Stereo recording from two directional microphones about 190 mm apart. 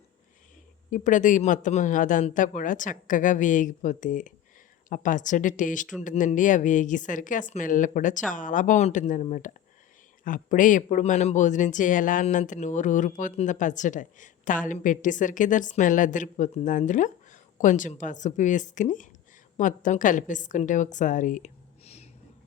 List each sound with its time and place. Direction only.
0.9 s a man's voice: 40° left (ahead or behind)